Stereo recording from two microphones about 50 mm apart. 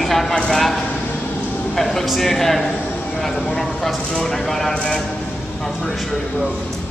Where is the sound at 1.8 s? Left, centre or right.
Centre.